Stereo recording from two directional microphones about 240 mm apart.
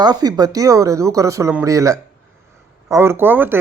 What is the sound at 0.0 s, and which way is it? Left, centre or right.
Speech, centre.